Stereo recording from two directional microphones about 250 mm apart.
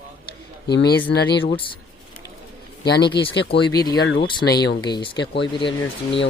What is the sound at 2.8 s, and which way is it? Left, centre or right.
Speech, left.